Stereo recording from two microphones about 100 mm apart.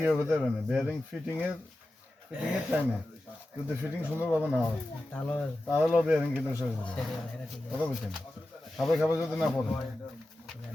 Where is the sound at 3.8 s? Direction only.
20° left (ahead or behind).